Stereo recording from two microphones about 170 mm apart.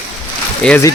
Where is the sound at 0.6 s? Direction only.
5° left (ahead or behind).